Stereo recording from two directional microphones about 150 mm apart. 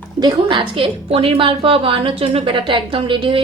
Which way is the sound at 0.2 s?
30° right (ahead or behind).